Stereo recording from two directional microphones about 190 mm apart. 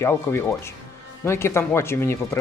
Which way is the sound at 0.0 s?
15° left (ahead or behind).